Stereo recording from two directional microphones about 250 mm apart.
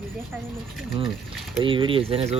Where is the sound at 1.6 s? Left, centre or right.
Centre.